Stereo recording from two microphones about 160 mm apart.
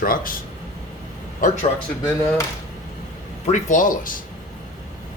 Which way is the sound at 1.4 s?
55° left (ahead or behind).